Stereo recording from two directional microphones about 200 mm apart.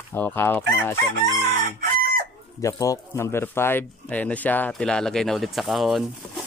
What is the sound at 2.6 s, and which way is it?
Speech, 15° left (ahead or behind).